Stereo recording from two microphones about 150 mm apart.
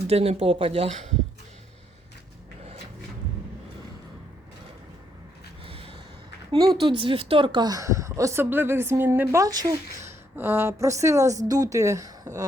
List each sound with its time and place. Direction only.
0.1 s speech: 45° right (ahead or behind)
5.6 s gasp: 40° right (ahead or behind)
6.5 s a woman's voice: 25° right (ahead or behind)
6.7 s a woman's voice: 35° right (ahead or behind)